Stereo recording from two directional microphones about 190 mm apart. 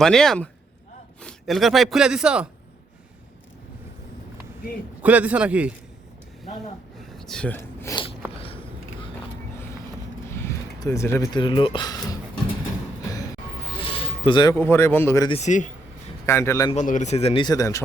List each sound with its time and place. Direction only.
0.0 s speech: centre (ahead or behind)
5.0 s a man's voice: 5° right (ahead or behind)
7.2 s speech: 5° left (ahead or behind)
8.4 s a sound: 30° left (ahead or behind)
10.2 s vehicle: 15° left (ahead or behind)
11.3 s speech: 25° left (ahead or behind)
13.7 s a sound: 30° left (ahead or behind)
14.5 s speech: 10° left (ahead or behind)
15.3 s speech: 35° left (ahead or behind)
16.2 s speech: 15° left (ahead or behind)
16.7 s speech: 40° left (ahead or behind); by 17.7 s 20° left (ahead or behind)